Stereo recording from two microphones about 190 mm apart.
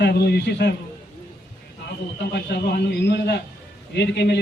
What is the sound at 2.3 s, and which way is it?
A man's voice, 60° left (ahead or behind).